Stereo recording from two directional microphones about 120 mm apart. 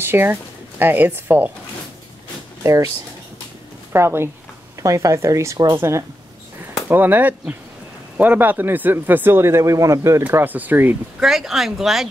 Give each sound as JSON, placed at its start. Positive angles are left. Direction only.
{"t": 0.0, "sound": "speech", "side_deg": -15}
{"t": 2.6, "sound": "speech", "side_deg": -25}
{"t": 3.9, "sound": "speech", "side_deg": -20}
{"t": 11.1, "sound": "speech", "side_deg": 0}